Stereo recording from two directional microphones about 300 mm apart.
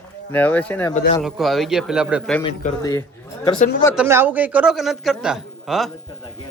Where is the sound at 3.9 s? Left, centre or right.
Centre.